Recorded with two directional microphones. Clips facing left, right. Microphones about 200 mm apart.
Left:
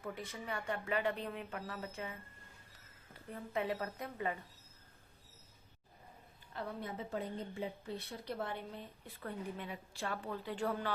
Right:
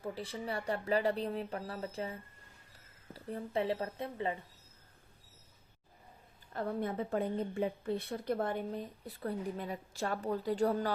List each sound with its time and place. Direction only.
0.0 s speech: 30° right (ahead or behind)
6.5 s a woman's voice: 50° right (ahead or behind)